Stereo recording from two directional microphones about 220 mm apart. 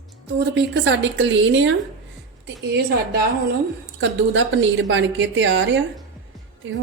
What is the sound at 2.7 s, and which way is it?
A woman's voice, 50° right (ahead or behind).